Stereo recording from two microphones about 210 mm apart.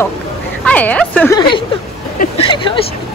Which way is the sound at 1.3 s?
20° left (ahead or behind).